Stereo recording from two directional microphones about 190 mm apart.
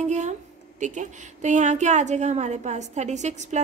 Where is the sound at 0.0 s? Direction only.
40° right (ahead or behind).